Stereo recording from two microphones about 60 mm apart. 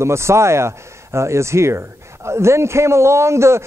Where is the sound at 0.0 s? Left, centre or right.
Right.